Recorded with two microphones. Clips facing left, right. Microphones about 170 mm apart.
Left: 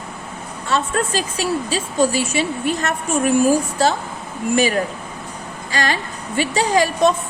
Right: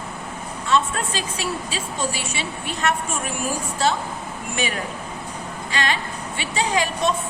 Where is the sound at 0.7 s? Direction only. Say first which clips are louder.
Left 2 dB; 40° left (ahead or behind).